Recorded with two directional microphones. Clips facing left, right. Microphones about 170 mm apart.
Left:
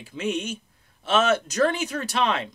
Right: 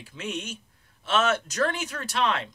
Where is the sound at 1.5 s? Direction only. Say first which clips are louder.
Left 5 dB; 15° left (ahead or behind).